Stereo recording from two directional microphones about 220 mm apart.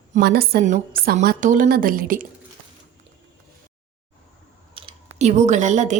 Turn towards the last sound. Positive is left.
turn(degrees=-35)  # may be behind; listen again after turning